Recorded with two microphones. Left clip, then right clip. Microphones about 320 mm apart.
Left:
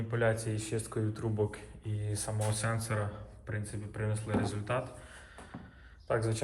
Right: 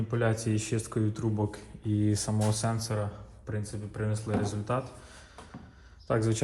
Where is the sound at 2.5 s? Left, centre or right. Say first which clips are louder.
Right 3 dB; centre.